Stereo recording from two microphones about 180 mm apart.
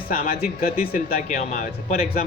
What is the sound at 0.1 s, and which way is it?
Speech, 55° left (ahead or behind).